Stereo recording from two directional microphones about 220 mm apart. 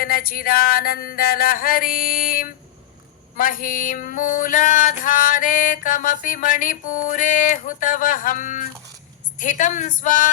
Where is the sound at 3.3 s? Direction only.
40° left (ahead or behind).